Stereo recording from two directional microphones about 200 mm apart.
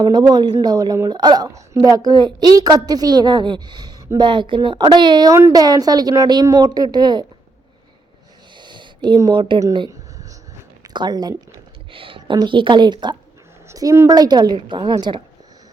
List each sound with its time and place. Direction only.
0.0 s a woman's voice: 20° right (ahead or behind)
8.5 s a sound: 25° right (ahead or behind)
10.8 s a woman's voice: 20° right (ahead or behind)